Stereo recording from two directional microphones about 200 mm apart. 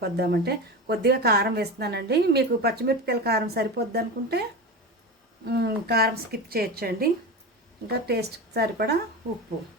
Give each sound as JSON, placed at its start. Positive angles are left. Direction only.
{"t": 0.0, "sound": "a woman's voice", "side_deg": -55}
{"t": 5.5, "sound": "a woman's voice", "side_deg": -50}